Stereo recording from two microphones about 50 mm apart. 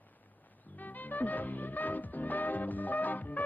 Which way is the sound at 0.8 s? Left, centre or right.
Left.